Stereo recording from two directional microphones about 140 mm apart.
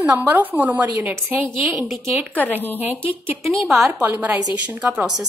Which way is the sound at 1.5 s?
Centre (ahead or behind).